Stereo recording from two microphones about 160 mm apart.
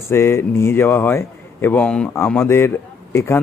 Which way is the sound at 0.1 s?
15° left (ahead or behind).